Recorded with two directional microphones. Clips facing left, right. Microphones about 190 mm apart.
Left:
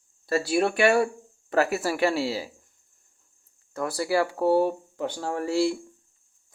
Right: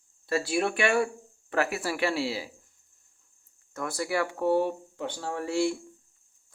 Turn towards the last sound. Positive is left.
turn(degrees=35)  # may be behind; listen again after turning